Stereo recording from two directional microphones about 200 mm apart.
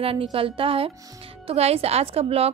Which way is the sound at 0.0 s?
30° right (ahead or behind).